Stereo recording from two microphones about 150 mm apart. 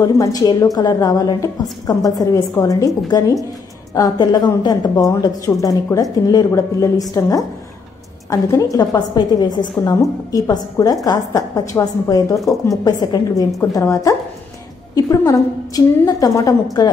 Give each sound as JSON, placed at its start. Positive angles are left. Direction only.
{"t": 0.0, "sound": "a woman's voice", "side_deg": 25}